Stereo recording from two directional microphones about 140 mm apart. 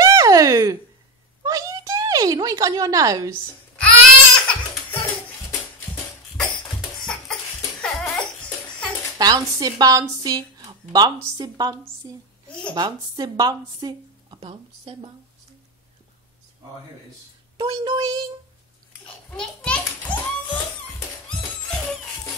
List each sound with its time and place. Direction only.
0.0 s a sound: 25° right (ahead or behind)
3.8 s baby cry: 10° left (ahead or behind)
7.8 s a sound: 5° left (ahead or behind)
9.2 s speech: 25° right (ahead or behind)
12.7 s speech: 25° right (ahead or behind)
14.4 s speech: 40° right (ahead or behind)
17.6 s speech: 30° right (ahead or behind)
19.0 s a child's voice: 5° left (ahead or behind)
21.3 s a sound: 10° left (ahead or behind)